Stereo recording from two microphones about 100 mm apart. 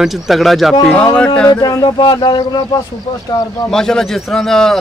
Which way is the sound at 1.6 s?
45° left (ahead or behind).